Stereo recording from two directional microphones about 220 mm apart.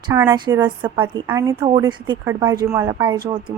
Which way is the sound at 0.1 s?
15° right (ahead or behind).